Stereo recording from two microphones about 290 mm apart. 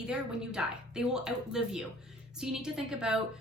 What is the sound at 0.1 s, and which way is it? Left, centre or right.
A woman's voice, centre.